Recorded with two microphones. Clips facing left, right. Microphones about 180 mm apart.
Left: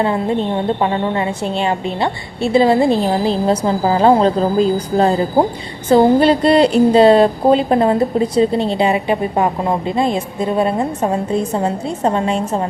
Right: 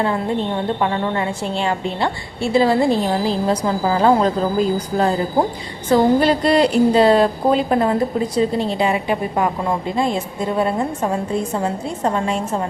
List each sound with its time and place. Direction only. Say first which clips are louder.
0.8 s a woman's voice: left 3 dB; 20° left (ahead or behind)